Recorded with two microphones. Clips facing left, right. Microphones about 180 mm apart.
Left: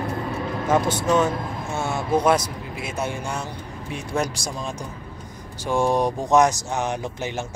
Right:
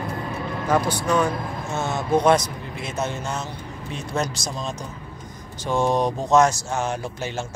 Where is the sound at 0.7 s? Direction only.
20° left (ahead or behind).